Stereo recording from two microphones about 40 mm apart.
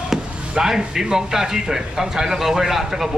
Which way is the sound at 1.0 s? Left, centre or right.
Centre.